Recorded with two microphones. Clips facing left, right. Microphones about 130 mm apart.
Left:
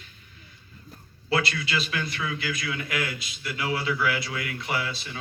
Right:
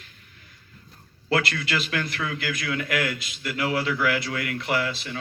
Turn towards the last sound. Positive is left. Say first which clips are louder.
# right 4 dB
turn(degrees=-65)  # may be behind; listen again after turning